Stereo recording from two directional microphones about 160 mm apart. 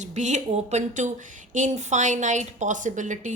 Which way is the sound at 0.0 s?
50° right (ahead or behind).